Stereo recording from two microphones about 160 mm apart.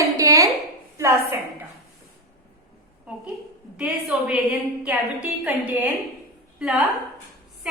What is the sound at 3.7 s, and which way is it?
A woman's voice, 5° right (ahead or behind).